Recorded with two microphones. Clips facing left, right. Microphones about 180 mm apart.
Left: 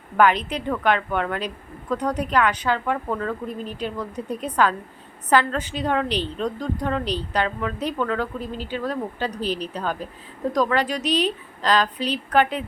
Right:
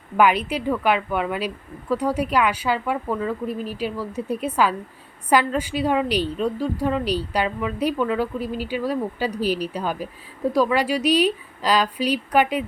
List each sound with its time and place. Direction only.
0.2 s a woman's voice: 10° right (ahead or behind)